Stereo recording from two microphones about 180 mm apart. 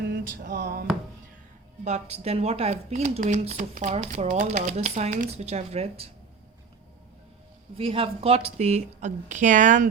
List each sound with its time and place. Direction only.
0.5 s speech: 50° right (ahead or behind)
1.8 s speech: 40° right (ahead or behind)
7.8 s speech: 30° right (ahead or behind)